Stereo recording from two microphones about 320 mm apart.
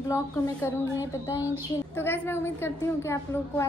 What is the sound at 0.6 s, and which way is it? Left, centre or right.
A woman's voice, centre.